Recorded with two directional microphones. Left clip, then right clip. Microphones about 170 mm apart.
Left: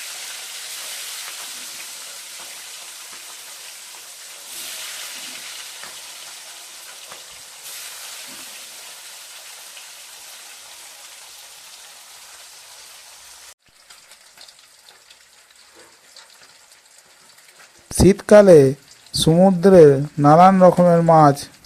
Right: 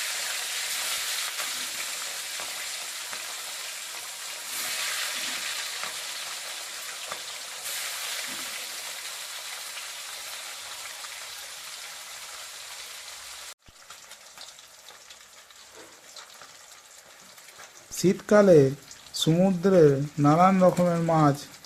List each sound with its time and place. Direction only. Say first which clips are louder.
18.0 s speech: left 9 dB; 45° left (ahead or behind)